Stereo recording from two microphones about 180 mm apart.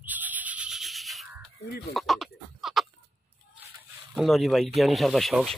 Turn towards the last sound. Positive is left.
turn(degrees=0)  # may be behind; listen again after turning